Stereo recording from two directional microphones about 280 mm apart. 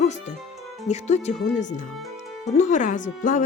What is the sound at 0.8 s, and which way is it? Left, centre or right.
Speech, left.